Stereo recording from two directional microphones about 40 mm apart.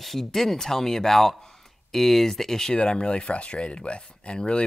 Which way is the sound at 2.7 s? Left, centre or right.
Left.